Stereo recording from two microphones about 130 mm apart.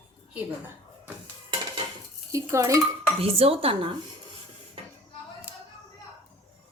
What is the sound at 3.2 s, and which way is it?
Speech, 50° right (ahead or behind).